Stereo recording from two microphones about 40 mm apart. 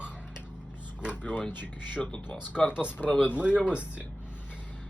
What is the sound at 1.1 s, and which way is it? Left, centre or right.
Speech, left.